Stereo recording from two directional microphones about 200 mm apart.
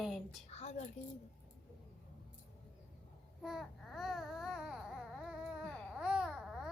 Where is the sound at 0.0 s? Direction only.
Centre (ahead or behind).